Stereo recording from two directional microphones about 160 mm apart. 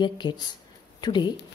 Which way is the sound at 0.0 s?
30° left (ahead or behind).